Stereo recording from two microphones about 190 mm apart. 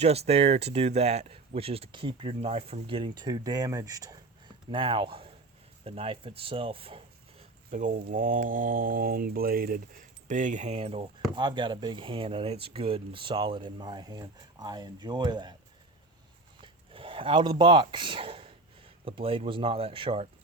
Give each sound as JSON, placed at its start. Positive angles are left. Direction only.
{"t": 0.0, "sound": "speech", "side_deg": -35}
{"t": 7.7, "sound": "speech", "side_deg": -45}
{"t": 16.6, "sound": "speech", "side_deg": -30}